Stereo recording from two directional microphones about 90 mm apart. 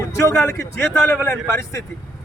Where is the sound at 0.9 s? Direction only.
10° left (ahead or behind).